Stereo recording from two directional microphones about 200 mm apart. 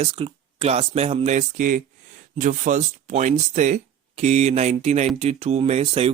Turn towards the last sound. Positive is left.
turn(degrees=-30)  # may be behind; listen again after turning